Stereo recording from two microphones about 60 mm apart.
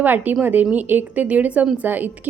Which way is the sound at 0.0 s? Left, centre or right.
Right.